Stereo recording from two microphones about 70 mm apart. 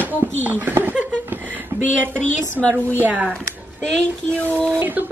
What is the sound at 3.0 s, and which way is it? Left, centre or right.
Speech, right.